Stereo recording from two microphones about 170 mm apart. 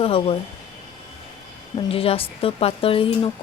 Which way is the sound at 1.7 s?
35° left (ahead or behind).